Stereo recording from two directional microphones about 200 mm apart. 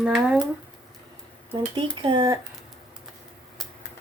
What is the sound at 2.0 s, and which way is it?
Speech, 25° right (ahead or behind).